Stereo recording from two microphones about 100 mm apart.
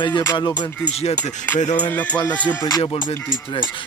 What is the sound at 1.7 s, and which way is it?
Speech, 15° left (ahead or behind).